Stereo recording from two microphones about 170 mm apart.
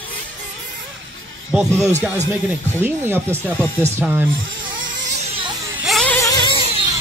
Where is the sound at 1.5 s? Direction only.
5° right (ahead or behind).